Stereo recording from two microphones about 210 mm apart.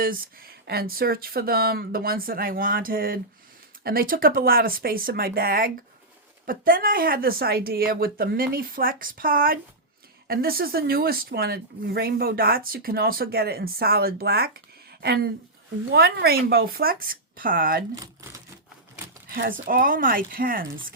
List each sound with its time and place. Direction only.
0.0 s speech: 45° right (ahead or behind)
17.9 s speech: 15° right (ahead or behind)
19.6 s speech: 40° right (ahead or behind)